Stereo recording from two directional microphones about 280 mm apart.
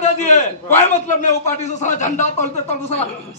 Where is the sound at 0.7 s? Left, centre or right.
Left.